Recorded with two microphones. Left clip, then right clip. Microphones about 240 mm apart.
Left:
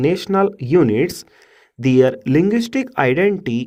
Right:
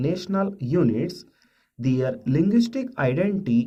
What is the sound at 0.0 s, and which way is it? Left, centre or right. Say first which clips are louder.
Speech: left 10 dB; left.